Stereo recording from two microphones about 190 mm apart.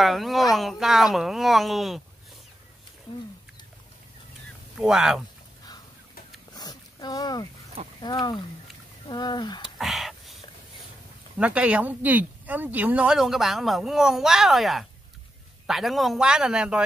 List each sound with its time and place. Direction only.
0.0 s speech: centre (ahead or behind)
4.7 s speech: centre (ahead or behind)
6.5 s a sound: 20° left (ahead or behind)
8.0 s speech: 20° left (ahead or behind)
9.6 s a sound: centre (ahead or behind)
11.3 s speech: 5° right (ahead or behind)